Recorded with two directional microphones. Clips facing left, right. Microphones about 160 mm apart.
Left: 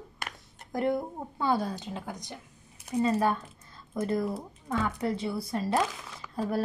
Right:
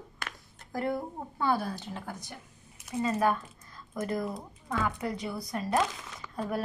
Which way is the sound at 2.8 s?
30° left (ahead or behind).